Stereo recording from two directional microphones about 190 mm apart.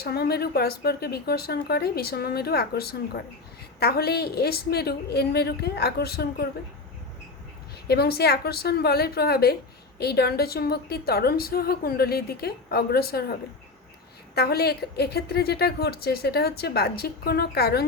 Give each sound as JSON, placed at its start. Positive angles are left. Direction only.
{"t": 0.0, "sound": "a woman's voice", "side_deg": 55}
{"t": 7.9, "sound": "a woman's voice", "side_deg": 55}
{"t": 14.3, "sound": "a woman's voice", "side_deg": 55}